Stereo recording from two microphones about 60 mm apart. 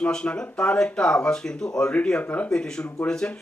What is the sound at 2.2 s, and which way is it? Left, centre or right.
Speech, left.